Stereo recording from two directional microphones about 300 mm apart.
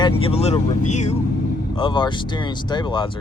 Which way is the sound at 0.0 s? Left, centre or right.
Centre.